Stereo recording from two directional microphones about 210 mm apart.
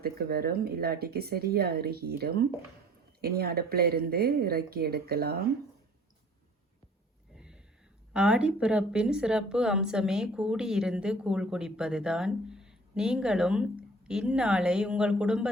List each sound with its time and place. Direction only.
0.0 s speech: 50° right (ahead or behind)
7.3 s a sound: 5° right (ahead or behind)
8.1 s a woman's voice: 5° right (ahead or behind)